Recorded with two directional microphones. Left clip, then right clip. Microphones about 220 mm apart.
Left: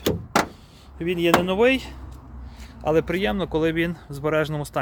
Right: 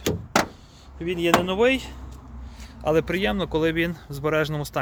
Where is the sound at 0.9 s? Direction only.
15° left (ahead or behind); by 4.8 s centre (ahead or behind).